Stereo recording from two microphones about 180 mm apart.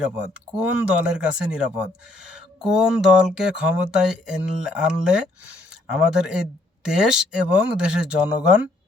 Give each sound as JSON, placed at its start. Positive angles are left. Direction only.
{"t": 0.0, "sound": "speech", "side_deg": -5}